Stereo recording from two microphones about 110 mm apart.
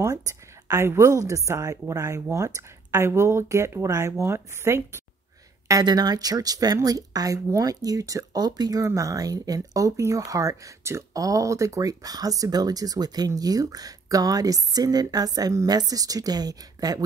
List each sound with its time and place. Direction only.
0.7 s speech: 25° right (ahead or behind)
5.7 s speech: 35° right (ahead or behind)